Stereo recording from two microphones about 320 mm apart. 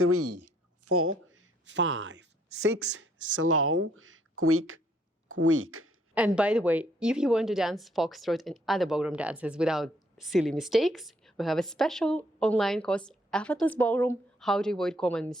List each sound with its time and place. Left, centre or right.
0.0 s speech: right
6.1 s a woman's voice: centre